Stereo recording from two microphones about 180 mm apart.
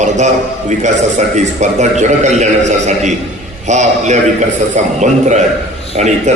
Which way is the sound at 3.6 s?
40° right (ahead or behind).